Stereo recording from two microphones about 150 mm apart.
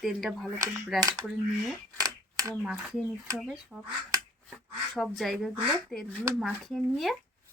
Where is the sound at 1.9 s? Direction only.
25° right (ahead or behind).